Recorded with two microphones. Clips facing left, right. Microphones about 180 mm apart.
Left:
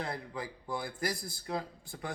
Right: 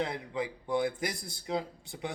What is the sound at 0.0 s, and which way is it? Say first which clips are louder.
Speech: right 5 dB; 20° right (ahead or behind).